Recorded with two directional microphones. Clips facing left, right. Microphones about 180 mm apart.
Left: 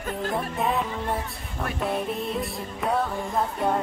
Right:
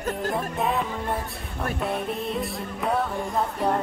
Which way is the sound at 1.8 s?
Centre (ahead or behind).